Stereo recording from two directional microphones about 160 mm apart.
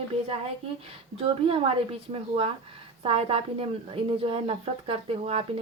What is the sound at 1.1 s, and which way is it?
Speech, 35° right (ahead or behind).